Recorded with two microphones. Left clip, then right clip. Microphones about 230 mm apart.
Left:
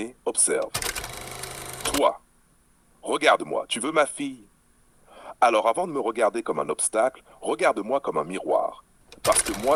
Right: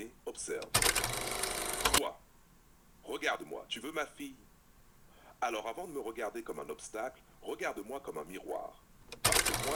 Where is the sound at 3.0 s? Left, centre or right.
Left.